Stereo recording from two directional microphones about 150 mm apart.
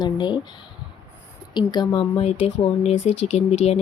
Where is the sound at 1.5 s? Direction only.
30° left (ahead or behind).